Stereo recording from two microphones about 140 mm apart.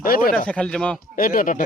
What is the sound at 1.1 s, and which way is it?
Speech, 90° left.